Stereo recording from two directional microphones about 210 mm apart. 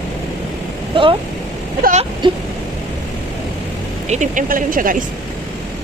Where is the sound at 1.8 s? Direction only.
35° right (ahead or behind).